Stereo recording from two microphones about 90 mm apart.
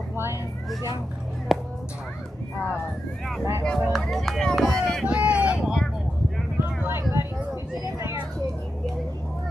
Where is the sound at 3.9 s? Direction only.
Centre (ahead or behind).